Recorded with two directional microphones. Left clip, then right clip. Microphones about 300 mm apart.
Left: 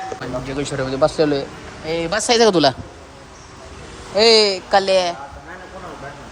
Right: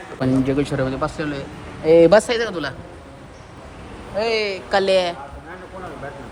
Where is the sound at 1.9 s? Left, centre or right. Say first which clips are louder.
Right 10 dB; centre.